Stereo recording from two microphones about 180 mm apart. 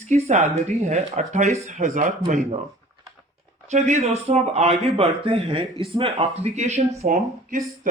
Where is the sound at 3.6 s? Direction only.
40° right (ahead or behind).